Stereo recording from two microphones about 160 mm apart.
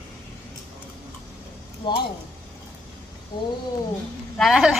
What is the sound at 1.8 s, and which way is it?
Speech, 30° left (ahead or behind).